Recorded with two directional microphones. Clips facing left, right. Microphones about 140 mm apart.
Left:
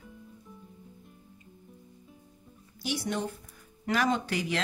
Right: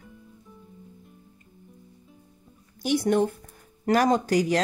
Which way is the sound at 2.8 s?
50° right (ahead or behind).